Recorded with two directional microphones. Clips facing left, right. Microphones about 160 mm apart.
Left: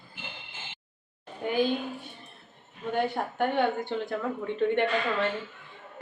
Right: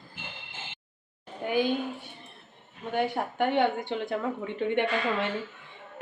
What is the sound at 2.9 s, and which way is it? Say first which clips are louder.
A woman's voice: right 1 dB; 15° right (ahead or behind).